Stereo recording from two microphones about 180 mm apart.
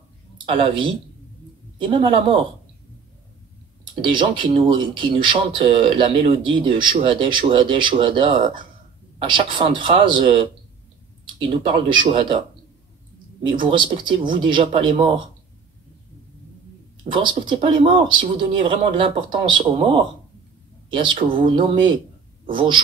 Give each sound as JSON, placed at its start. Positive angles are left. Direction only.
{"t": 0.5, "sound": "speech", "side_deg": -30}
{"t": 4.0, "sound": "speech", "side_deg": -25}
{"t": 12.0, "sound": "speech", "side_deg": -30}
{"t": 13.6, "sound": "speech", "side_deg": -30}
{"t": 17.1, "sound": "speech", "side_deg": -25}